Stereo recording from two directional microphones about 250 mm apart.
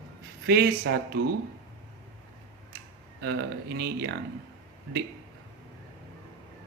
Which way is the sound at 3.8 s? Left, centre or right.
Right.